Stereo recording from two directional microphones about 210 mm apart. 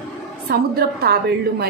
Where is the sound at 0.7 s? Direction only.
50° right (ahead or behind).